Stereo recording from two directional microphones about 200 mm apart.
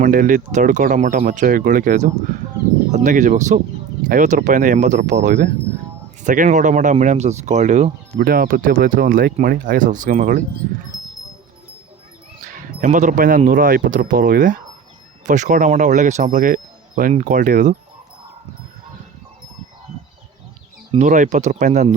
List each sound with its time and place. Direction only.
0.0 s speech: 40° right (ahead or behind)
12.5 s speech: 40° right (ahead or behind)
20.9 s speech: 40° right (ahead or behind)